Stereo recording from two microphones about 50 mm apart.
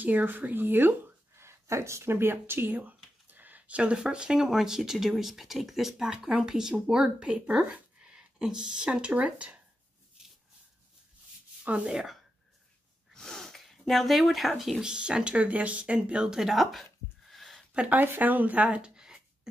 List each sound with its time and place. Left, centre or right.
0.0 s speech: right
2.7 s speech: right
11.8 s speech: centre
13.1 s a sound: centre
14.8 s speech: centre
16.3 s a sound: centre
17.7 s speech: right
18.0 s speech: right
18.9 s a sound: centre